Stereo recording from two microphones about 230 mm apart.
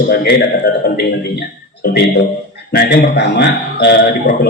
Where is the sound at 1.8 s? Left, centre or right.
Left.